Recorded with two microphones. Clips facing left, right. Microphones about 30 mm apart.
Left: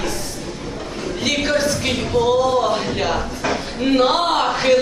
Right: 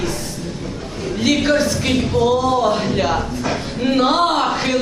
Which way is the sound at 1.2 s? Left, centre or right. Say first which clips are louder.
Right 3 dB; centre.